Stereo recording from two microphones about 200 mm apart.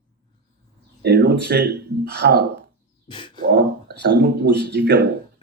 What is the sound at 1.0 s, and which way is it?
Speech, 55° right (ahead or behind).